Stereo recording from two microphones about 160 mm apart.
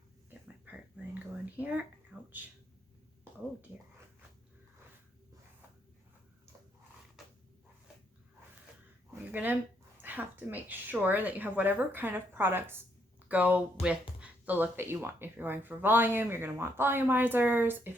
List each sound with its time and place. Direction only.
0.6 s whispering: 10° right (ahead or behind)
1.5 s speech: 10° right (ahead or behind)
9.0 s a sound: 10° right (ahead or behind)
10.0 s speech: 10° right (ahead or behind)